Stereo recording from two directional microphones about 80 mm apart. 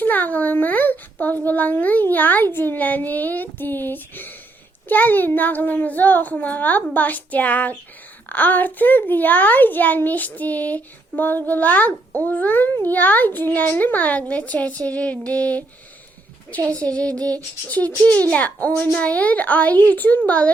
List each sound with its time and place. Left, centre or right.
0.0 s a child's voice: left